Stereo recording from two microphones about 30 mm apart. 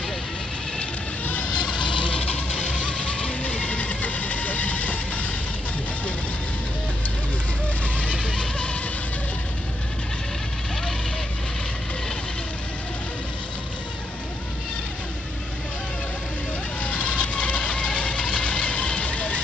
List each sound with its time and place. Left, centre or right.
1.2 s vehicle: left
2.0 s music: left
2.5 s vehicle: left
8.4 s music: left
16.8 s vehicle: left